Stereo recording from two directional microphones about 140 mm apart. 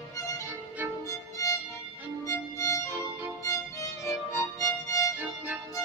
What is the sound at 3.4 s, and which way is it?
Music, 20° left (ahead or behind).